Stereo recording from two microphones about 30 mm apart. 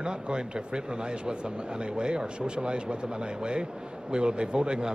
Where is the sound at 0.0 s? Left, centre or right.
Right.